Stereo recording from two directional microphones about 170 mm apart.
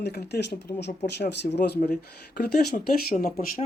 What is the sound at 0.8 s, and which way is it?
Speech, 80° left.